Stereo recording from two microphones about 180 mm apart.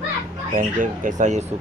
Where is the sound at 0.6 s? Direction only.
45° right (ahead or behind).